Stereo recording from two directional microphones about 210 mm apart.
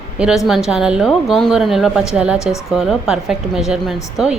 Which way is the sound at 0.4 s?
Centre (ahead or behind).